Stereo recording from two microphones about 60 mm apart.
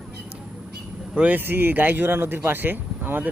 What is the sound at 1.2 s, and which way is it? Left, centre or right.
Speech, right.